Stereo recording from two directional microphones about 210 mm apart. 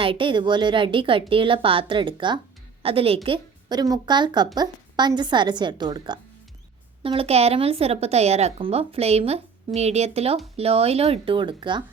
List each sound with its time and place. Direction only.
0.0 s speech: 25° right (ahead or behind)